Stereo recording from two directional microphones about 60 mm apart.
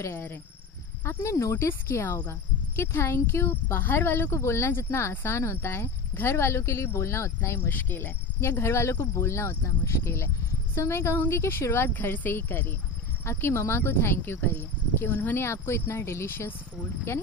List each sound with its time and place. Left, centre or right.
0.1 s speech: left
7.4 s speech: left